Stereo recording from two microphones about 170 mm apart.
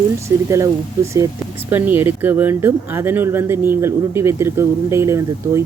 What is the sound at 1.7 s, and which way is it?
Speech, 10° right (ahead or behind).